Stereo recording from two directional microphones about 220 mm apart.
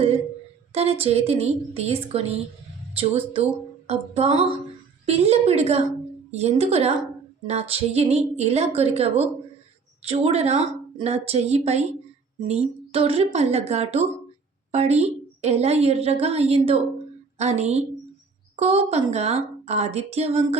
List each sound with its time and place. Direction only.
0.7 s a woman's voice: 25° right (ahead or behind)